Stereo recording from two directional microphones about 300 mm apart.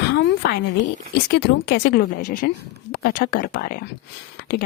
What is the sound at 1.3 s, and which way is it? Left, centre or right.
Speech, left.